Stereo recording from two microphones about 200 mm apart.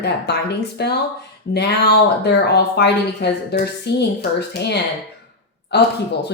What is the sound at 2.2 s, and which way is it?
A woman's voice, 55° left (ahead or behind).